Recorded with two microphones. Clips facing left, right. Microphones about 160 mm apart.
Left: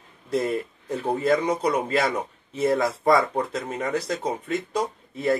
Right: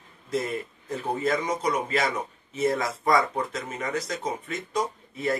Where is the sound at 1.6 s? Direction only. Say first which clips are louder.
Left 3 dB; 30° left (ahead or behind).